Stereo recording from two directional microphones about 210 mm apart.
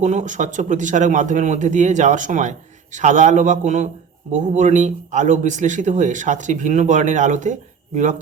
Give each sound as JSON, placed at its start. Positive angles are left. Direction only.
{"t": 0.0, "sound": "speech", "side_deg": -35}